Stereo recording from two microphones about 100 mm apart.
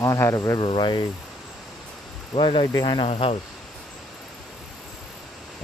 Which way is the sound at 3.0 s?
80° left.